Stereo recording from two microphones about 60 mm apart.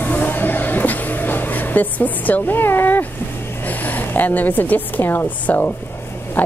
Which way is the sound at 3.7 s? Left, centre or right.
Left.